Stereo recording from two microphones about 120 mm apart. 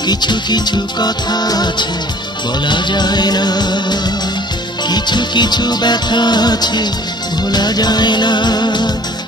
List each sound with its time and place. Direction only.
0.0 s music: 35° left (ahead or behind)